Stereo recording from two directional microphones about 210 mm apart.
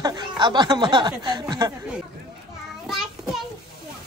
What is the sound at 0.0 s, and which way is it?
Speech, 20° right (ahead or behind).